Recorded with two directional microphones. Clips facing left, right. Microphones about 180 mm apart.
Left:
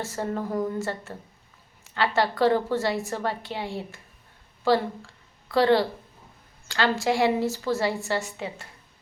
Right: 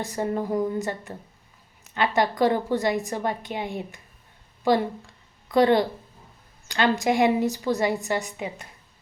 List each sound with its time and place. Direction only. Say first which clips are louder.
0.0 s a woman's voice: right 3 dB; 15° right (ahead or behind)